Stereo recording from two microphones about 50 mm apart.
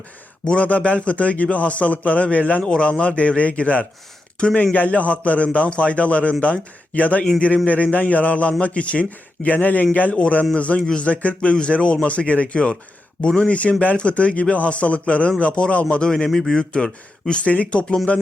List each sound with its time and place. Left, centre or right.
0.4 s a man's voice: left